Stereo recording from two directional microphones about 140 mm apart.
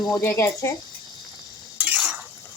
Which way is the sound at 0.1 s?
20° left (ahead or behind).